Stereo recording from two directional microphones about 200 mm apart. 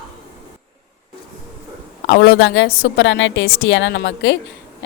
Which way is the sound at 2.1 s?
65° left (ahead or behind).